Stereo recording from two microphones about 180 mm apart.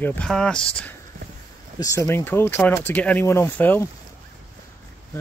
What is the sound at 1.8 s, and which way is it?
Speech, 15° left (ahead or behind).